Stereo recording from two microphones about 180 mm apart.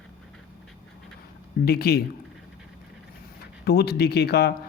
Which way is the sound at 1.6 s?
60° left (ahead or behind).